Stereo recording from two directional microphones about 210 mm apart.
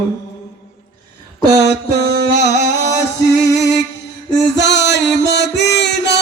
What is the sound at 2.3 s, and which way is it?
Music, 55° left (ahead or behind).